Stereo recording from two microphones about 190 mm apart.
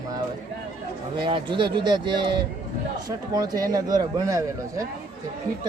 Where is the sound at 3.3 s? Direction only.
20° right (ahead or behind).